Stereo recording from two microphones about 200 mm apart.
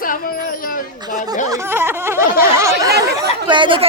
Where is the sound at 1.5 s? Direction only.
10° right (ahead or behind).